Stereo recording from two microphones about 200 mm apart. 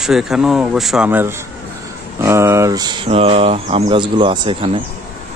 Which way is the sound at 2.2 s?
15° right (ahead or behind).